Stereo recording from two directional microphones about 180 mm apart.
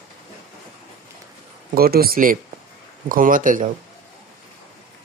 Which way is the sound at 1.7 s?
55° right (ahead or behind).